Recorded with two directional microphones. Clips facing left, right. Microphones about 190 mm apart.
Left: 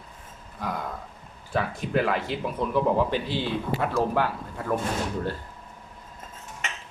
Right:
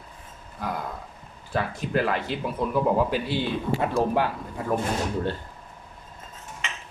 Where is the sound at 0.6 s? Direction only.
Centre (ahead or behind).